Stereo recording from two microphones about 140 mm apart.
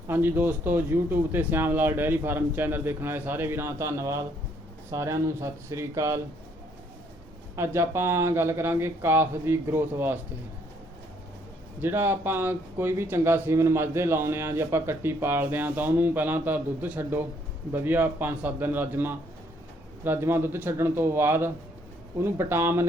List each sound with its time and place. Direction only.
0.1 s speech: 15° right (ahead or behind)
7.5 s speech: 20° right (ahead or behind)
11.8 s speech: 15° right (ahead or behind)